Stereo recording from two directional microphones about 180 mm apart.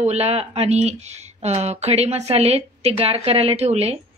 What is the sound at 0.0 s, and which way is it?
Speech, 35° right (ahead or behind).